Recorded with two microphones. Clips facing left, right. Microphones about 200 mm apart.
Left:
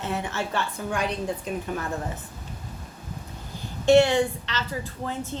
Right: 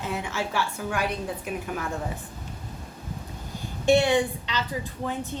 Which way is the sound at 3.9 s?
15° right (ahead or behind).